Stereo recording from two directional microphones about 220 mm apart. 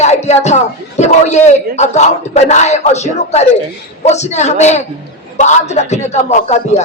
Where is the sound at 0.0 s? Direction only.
30° left (ahead or behind).